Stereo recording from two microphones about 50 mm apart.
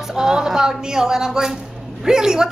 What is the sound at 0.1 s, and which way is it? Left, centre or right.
A woman's voice, centre.